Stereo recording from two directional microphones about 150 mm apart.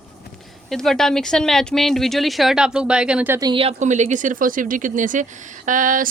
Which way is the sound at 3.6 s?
50° right (ahead or behind).